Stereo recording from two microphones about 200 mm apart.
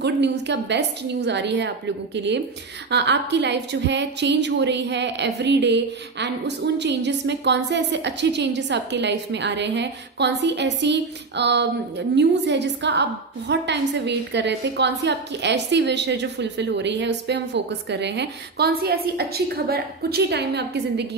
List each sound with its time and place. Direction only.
0.0 s a woman's voice: 60° right (ahead or behind)